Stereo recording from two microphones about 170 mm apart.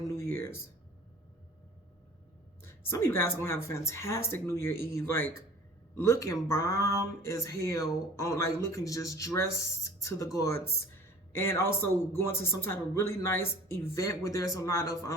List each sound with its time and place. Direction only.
0.2 s music: 15° left (ahead or behind)
2.8 s speech: 15° left (ahead or behind)
11.3 s speech: 15° left (ahead or behind)